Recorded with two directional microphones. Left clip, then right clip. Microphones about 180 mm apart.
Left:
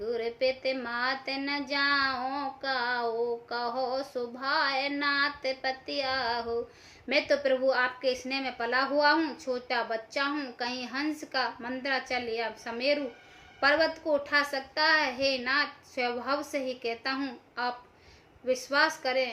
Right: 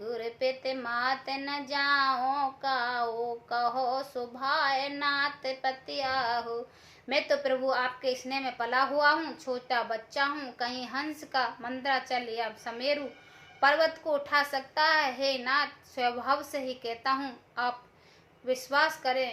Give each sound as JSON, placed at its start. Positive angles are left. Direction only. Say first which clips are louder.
{"t": 0.1, "sound": "a woman's voice", "louder": "left 2 dB", "side_deg": 15}